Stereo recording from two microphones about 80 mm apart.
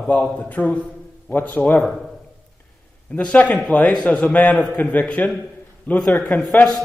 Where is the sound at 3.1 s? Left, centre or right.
Centre.